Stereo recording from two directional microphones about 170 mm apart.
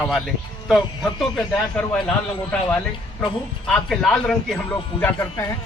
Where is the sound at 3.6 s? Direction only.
5° left (ahead or behind).